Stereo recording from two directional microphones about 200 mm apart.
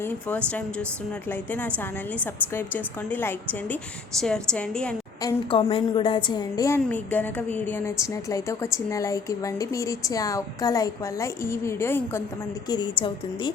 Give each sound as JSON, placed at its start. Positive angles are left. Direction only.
{"t": 0.0, "sound": "a woman's voice", "side_deg": 10}
{"t": 5.2, "sound": "a woman's voice", "side_deg": 20}
{"t": 12.6, "sound": "a woman's voice", "side_deg": 20}